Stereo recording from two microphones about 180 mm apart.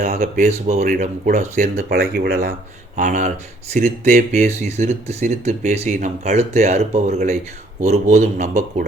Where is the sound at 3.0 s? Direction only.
45° right (ahead or behind).